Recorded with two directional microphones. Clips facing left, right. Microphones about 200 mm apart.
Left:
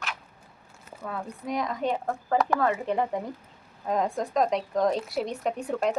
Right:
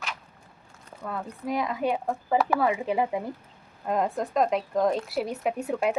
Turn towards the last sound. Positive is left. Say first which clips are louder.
# right 1 dB
turn(degrees=-5)  # may be behind; listen again after turning